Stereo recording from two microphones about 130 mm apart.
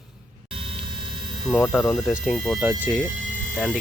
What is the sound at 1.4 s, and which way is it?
Speech, centre (ahead or behind).